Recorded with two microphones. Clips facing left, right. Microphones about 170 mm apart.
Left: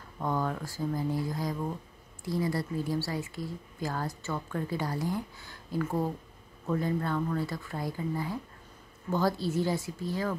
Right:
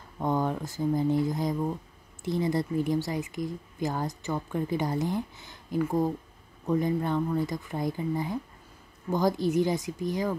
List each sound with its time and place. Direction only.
0.2 s speech: 20° right (ahead or behind)